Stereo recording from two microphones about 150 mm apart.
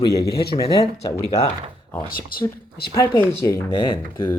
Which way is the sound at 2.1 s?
75° left (ahead or behind).